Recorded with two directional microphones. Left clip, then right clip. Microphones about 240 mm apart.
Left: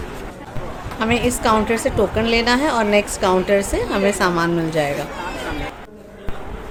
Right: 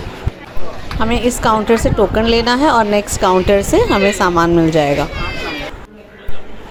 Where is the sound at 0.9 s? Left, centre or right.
Right.